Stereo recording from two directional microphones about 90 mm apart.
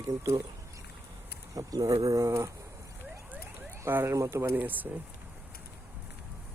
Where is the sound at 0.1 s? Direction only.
40° right (ahead or behind).